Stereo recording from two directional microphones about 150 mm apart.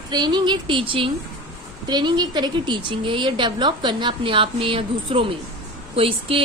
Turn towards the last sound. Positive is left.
turn(degrees=-35)  # may be behind; listen again after turning